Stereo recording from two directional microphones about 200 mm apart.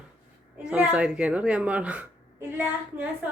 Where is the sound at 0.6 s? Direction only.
5° right (ahead or behind).